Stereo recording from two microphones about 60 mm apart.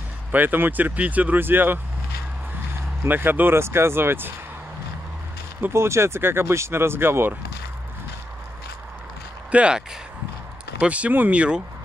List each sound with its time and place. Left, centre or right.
0.3 s speech: right
3.1 s speech: right
5.7 s speech: right
9.5 s speech: centre